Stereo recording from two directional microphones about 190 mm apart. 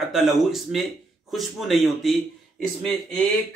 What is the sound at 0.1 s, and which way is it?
Speech, centre (ahead or behind).